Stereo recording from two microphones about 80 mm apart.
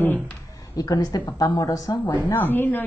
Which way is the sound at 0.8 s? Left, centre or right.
Left.